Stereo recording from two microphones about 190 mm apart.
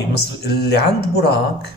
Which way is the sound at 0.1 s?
60° left (ahead or behind).